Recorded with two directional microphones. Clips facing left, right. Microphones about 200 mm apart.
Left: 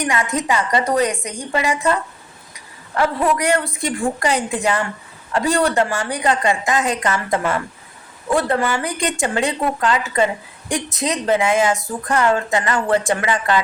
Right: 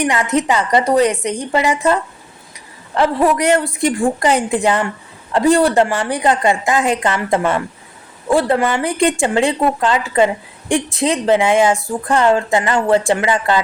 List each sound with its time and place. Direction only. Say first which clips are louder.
0.1 s speech: right 4 dB; 30° right (ahead or behind)
3.2 s speech: right 4 dB; 20° right (ahead or behind)
4.2 s a woman's voice: right 4 dB; 30° right (ahead or behind)